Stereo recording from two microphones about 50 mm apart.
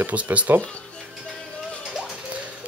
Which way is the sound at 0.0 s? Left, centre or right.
Right.